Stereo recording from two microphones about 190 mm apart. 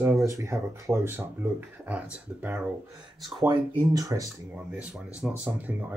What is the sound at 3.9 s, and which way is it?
Speech, 20° right (ahead or behind).